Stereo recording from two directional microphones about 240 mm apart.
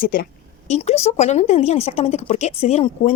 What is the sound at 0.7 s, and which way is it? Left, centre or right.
Speech, left.